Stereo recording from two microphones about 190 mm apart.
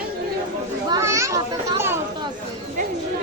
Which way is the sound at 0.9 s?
15° right (ahead or behind).